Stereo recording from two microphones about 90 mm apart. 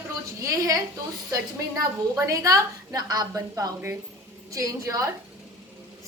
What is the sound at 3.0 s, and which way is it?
A woman's voice, 50° right (ahead or behind).